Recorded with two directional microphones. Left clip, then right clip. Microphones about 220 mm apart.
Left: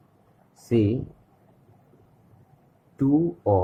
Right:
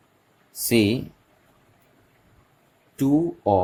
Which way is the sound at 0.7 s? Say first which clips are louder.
Right 3 dB; 30° right (ahead or behind).